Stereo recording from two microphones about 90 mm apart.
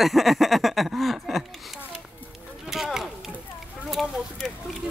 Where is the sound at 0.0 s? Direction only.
Centre (ahead or behind).